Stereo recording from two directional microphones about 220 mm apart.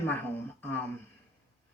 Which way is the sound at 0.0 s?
10° left (ahead or behind).